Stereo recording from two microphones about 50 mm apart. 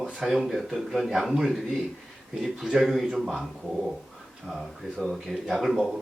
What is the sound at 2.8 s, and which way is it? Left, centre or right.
Speech, centre.